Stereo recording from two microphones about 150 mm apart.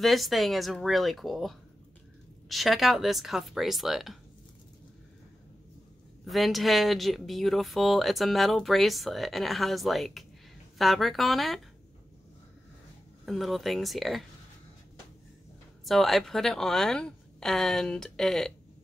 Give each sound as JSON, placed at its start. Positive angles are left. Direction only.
{"t": 0.0, "sound": "speech", "side_deg": 0}
{"t": 6.2, "sound": "speech", "side_deg": 0}
{"t": 13.2, "sound": "speech", "side_deg": 0}
{"t": 15.8, "sound": "speech", "side_deg": 0}